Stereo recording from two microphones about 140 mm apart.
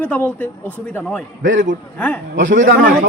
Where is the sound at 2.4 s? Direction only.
65° right (ahead or behind).